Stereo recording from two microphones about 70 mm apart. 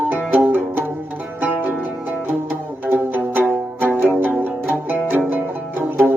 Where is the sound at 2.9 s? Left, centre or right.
Right.